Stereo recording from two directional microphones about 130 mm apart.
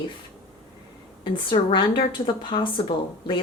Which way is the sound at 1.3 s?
40° left (ahead or behind).